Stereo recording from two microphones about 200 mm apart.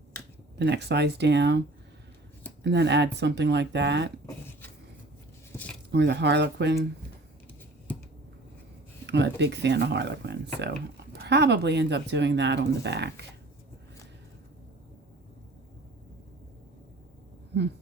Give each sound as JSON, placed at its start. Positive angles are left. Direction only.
{"t": 0.6, "sound": "speech", "side_deg": -60}
{"t": 2.6, "sound": "speech", "side_deg": -60}
{"t": 5.9, "sound": "speech", "side_deg": -60}
{"t": 9.0, "sound": "speech", "side_deg": -60}